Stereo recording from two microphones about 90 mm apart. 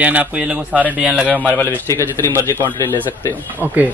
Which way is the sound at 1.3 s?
15° left (ahead or behind).